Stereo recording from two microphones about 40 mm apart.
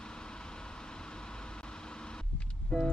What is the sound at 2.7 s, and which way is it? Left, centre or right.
Music, left.